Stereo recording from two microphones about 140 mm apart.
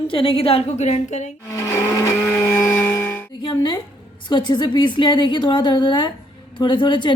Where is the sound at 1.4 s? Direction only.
25° left (ahead or behind).